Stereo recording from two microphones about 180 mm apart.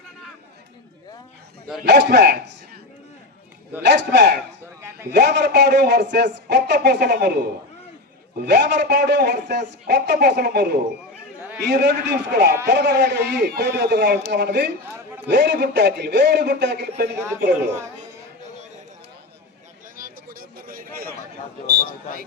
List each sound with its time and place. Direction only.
1.8 s a man's voice: 65° right (ahead or behind)
3.8 s a man's voice: 70° right (ahead or behind)
4.8 s a sound: 15° right (ahead or behind)
5.1 s a man's voice: 70° right (ahead or behind)
11.3 s chatter: 10° right (ahead or behind)
11.6 s a man's voice: 70° right (ahead or behind)
20.0 s a sound: 55° right (ahead or behind)